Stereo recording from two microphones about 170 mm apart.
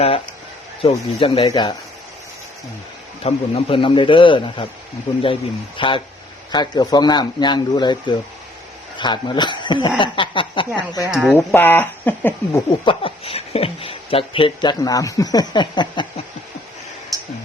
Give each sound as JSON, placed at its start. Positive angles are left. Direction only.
{"t": 0.8, "sound": "speech", "side_deg": 35}
{"t": 3.2, "sound": "speech", "side_deg": 35}
{"t": 11.3, "sound": "speech", "side_deg": 10}
{"t": 12.8, "sound": "speech", "side_deg": 30}